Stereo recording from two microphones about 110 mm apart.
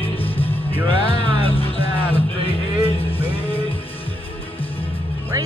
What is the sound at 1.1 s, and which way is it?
Music, 60° left (ahead or behind).